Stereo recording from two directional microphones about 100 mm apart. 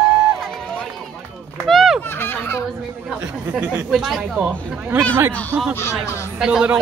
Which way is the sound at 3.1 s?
10° right (ahead or behind).